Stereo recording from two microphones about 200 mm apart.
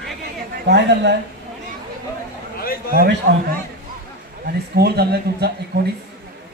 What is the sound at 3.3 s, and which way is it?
Speech, 50° right (ahead or behind).